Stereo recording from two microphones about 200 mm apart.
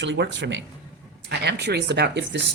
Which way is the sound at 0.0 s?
60° right (ahead or behind).